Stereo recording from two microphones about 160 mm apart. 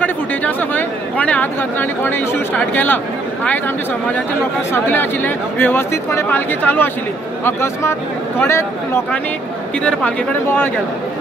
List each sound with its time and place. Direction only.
0.0 s speech: 10° left (ahead or behind)
9.8 s speech: 10° left (ahead or behind)